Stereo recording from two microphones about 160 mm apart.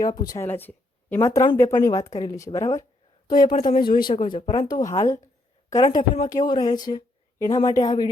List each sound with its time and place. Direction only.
0.0 s speech: 25° left (ahead or behind)
3.5 s speech: 55° left (ahead or behind)
3.8 s speech: 30° left (ahead or behind)